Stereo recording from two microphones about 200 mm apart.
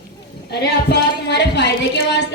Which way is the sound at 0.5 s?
55° left (ahead or behind).